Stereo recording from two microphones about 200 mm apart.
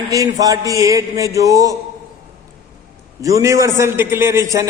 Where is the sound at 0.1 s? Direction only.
15° right (ahead or behind).